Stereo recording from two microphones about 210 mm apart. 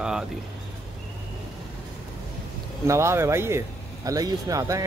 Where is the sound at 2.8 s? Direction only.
15° right (ahead or behind).